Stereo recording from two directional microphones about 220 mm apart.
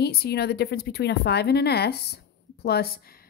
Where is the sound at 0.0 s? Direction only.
45° left (ahead or behind).